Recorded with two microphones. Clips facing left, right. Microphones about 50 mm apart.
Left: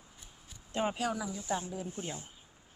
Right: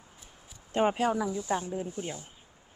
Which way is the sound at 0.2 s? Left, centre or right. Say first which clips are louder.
Right 2 dB; centre.